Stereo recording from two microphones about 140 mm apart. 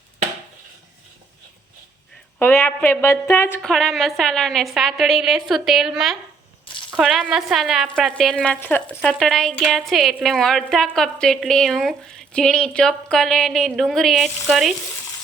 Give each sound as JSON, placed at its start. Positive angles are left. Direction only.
{"t": 2.4, "sound": "a woman's voice", "side_deg": 15}
{"t": 3.6, "sound": "a woman's voice", "side_deg": 5}
{"t": 9.0, "sound": "a woman's voice", "side_deg": 0}